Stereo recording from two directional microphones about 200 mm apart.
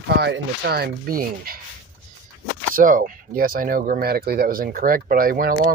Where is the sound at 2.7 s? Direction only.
45° right (ahead or behind).